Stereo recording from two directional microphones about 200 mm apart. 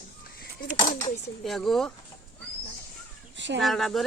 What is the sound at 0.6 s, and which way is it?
Speech, 45° left (ahead or behind).